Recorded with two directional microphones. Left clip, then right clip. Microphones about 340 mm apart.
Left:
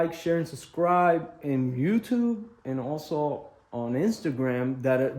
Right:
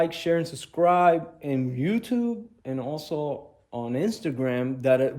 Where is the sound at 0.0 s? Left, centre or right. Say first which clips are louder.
Right 3 dB; centre.